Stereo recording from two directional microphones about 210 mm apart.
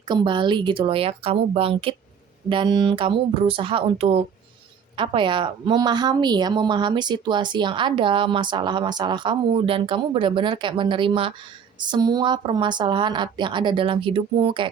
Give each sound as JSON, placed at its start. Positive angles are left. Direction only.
{"t": 0.1, "sound": "a woman's voice", "side_deg": -20}